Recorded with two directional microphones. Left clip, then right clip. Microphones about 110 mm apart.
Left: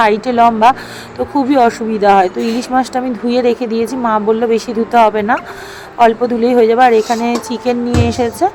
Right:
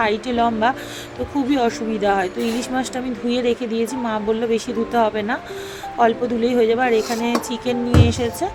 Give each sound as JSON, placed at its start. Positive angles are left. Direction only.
{"t": 0.0, "sound": "speech", "side_deg": 40}
{"t": 1.5, "sound": "speech", "side_deg": 45}